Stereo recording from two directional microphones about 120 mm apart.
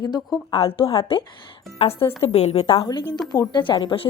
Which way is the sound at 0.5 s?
50° left (ahead or behind).